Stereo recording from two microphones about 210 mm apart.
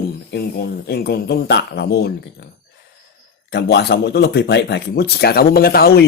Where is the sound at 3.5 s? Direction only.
50° left (ahead or behind).